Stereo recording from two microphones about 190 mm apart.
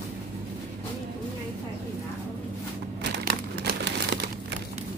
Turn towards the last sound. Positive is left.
turn(degrees=-55)  # may be behind; listen again after turning